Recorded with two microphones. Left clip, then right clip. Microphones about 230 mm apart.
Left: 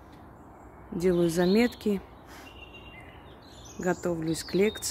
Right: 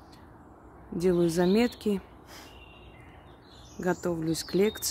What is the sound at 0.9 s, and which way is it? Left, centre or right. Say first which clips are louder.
Speech: even; centre.